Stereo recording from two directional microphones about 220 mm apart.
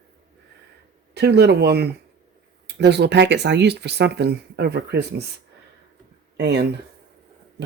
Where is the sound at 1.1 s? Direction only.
50° right (ahead or behind).